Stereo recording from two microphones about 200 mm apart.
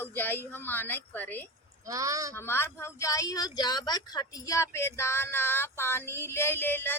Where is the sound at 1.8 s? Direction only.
15° right (ahead or behind).